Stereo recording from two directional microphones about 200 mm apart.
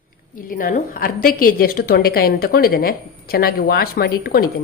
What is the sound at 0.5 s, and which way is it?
A woman's voice, 45° left (ahead or behind).